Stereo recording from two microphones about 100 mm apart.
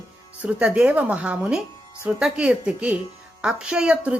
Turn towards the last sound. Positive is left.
turn(degrees=-10)  # may be behind; listen again after turning